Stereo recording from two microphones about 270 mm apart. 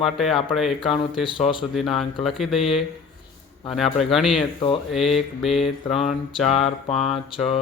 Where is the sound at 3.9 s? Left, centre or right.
Centre.